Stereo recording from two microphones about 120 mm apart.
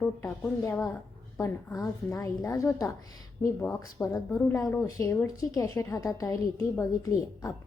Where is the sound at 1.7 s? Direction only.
25° left (ahead or behind).